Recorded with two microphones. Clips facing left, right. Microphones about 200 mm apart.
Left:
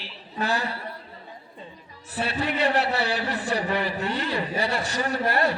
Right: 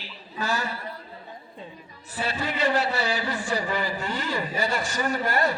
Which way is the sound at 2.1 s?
65° left (ahead or behind).